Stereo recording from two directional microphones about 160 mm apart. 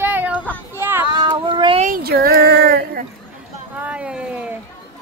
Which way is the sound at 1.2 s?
30° right (ahead or behind).